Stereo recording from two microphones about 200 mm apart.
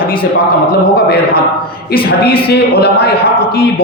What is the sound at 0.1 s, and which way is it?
A man's voice, 50° left (ahead or behind).